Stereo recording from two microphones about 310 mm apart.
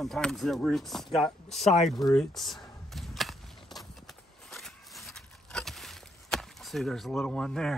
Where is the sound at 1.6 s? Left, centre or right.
Left.